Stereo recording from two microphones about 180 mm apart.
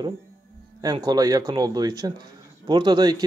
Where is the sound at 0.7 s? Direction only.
20° right (ahead or behind).